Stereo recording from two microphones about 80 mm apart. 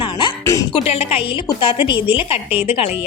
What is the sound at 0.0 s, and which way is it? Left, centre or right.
Music, left.